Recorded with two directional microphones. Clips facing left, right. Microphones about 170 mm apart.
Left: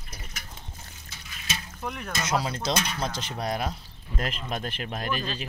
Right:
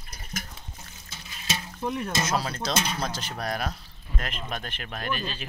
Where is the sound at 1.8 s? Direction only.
30° right (ahead or behind).